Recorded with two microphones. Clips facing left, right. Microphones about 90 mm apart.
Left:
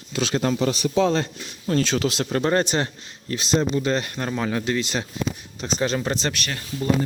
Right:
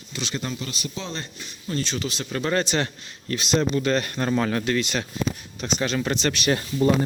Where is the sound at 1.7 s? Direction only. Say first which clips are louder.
Left 6 dB; 85° left.